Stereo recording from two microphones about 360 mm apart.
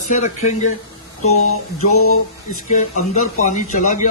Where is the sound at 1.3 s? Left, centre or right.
Left.